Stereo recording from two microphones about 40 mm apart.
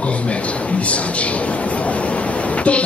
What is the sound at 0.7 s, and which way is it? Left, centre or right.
Speech, left.